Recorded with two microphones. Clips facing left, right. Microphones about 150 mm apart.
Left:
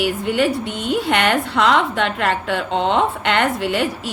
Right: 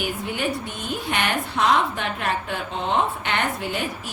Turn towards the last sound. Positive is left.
turn(degrees=80)